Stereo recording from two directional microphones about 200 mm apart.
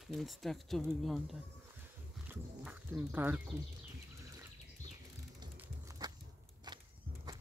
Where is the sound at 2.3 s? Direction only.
5° right (ahead or behind).